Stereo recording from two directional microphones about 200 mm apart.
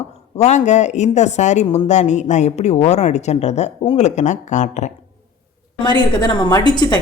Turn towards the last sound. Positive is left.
turn(degrees=20)  # may be behind; listen again after turning